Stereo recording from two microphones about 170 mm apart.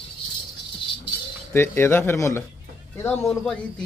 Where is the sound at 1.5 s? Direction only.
15° left (ahead or behind).